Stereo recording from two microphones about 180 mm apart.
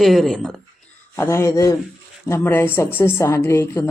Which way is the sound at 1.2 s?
15° left (ahead or behind).